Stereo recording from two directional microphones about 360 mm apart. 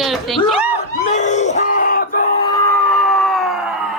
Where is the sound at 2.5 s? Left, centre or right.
Centre.